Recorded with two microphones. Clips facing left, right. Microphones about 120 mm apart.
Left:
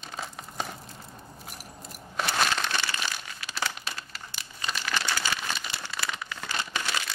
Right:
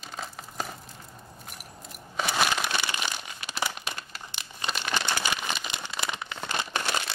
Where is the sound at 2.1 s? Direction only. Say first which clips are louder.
Right 1 dB; 5° right (ahead or behind).